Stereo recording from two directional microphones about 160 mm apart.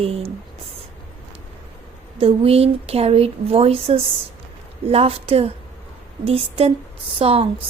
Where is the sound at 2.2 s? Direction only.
35° right (ahead or behind).